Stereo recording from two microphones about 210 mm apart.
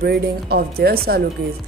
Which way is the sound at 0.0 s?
50° right (ahead or behind).